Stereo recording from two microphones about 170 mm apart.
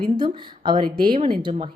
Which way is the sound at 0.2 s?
30° right (ahead or behind).